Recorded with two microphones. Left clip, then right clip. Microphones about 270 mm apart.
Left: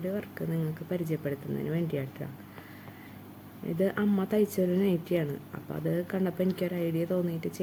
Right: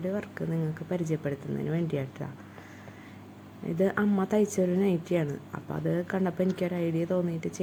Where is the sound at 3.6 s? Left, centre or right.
Centre.